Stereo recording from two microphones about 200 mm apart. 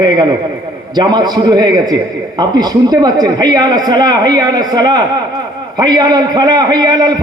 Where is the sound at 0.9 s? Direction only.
20° right (ahead or behind).